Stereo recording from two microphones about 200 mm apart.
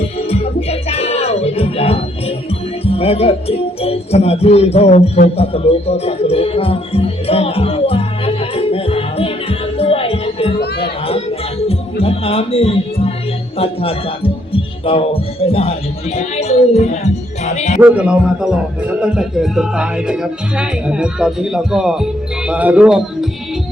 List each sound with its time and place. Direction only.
0.0 s music: 30° left (ahead or behind)
10.8 s chatter: 30° left (ahead or behind)
12.0 s music: 30° left (ahead or behind)
13.6 s speech: 30° left (ahead or behind)
17.7 s a man's voice: 5° right (ahead or behind)